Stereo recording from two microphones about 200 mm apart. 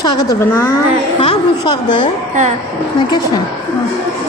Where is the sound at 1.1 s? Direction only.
25° left (ahead or behind).